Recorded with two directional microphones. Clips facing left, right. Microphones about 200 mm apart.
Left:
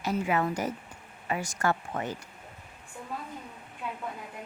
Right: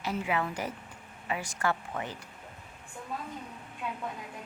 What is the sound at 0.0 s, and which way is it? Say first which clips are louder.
A woman's voice: left 3 dB; 45° left (ahead or behind).